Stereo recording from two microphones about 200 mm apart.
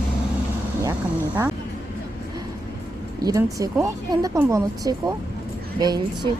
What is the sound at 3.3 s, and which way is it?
A woman's voice, 15° right (ahead or behind).